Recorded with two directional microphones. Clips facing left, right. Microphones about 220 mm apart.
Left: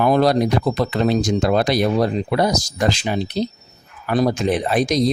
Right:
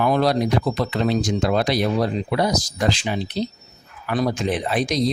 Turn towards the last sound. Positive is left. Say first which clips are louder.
# left 3 dB
turn(degrees=45)  # may be behind; listen again after turning